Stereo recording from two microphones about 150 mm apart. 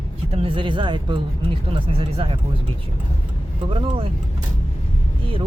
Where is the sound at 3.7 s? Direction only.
35° right (ahead or behind).